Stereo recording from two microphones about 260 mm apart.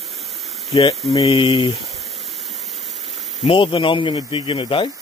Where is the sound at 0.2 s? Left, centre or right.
Right.